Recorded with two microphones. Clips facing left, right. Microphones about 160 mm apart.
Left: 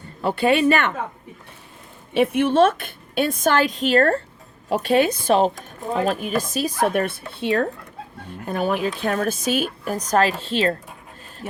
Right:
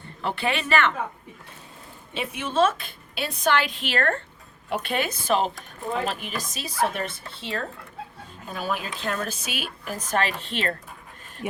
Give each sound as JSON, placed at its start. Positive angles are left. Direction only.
{"t": 0.2, "sound": "speech", "side_deg": 40}
{"t": 2.1, "sound": "speech", "side_deg": 55}